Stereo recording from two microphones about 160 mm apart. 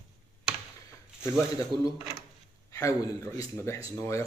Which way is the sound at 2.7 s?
20° left (ahead or behind).